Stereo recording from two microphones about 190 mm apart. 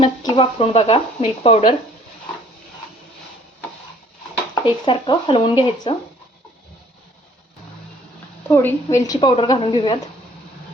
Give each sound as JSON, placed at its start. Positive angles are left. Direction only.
{"t": 0.0, "sound": "speech", "side_deg": 25}
{"t": 4.6, "sound": "speech", "side_deg": 25}
{"t": 8.4, "sound": "a woman's voice", "side_deg": 10}